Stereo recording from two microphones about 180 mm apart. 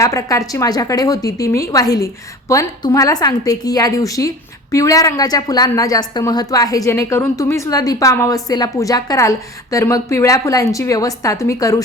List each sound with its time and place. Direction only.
0.0 s a woman's voice: 20° left (ahead or behind)